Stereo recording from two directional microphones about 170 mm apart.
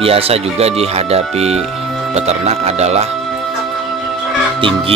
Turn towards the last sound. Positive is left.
turn(degrees=-30)  # may be behind; listen again after turning